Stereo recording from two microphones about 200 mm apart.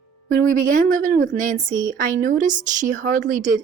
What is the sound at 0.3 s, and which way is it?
Speech, 40° right (ahead or behind).